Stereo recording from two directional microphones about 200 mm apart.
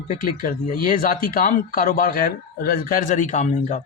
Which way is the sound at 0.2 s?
45° left (ahead or behind).